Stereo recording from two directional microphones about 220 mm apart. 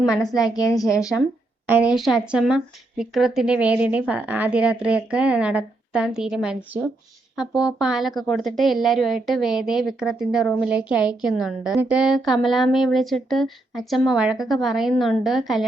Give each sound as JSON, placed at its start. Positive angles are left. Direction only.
{"t": 0.2, "sound": "a woman's voice", "side_deg": 15}
{"t": 1.6, "sound": "a woman's voice", "side_deg": -5}